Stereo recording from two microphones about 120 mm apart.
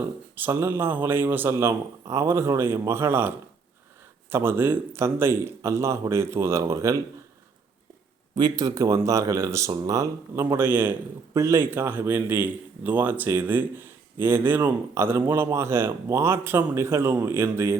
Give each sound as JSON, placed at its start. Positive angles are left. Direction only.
{"t": 0.3, "sound": "speech", "side_deg": -15}
{"t": 8.4, "sound": "speech", "side_deg": -35}